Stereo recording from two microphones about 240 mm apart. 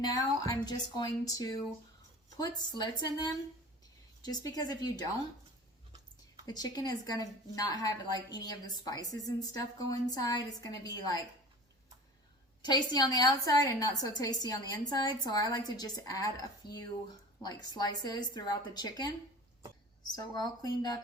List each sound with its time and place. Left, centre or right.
0.0 s a woman's voice: centre
2.6 s a woman's voice: centre
6.4 s a woman's voice: centre
12.6 s a woman's voice: centre